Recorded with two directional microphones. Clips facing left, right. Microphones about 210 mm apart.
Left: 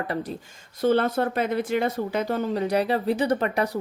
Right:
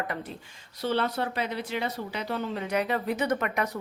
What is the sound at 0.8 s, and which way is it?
Speech, 50° left (ahead or behind).